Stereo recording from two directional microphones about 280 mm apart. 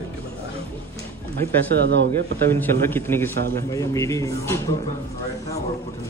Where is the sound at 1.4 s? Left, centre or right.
Right.